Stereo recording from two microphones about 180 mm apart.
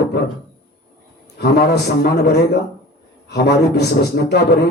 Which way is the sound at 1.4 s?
65° left (ahead or behind).